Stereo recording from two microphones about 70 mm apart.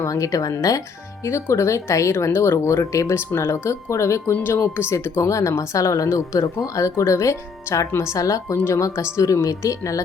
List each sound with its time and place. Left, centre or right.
0.0 s speech: left
1.2 s speech: left